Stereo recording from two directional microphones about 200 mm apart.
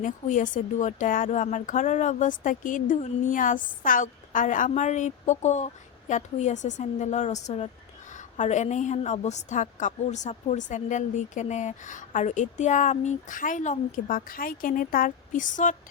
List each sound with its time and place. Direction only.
0.0 s speech: 40° left (ahead or behind)